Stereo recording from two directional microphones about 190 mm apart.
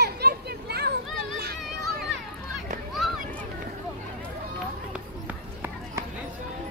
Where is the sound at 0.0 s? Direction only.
55° right (ahead or behind).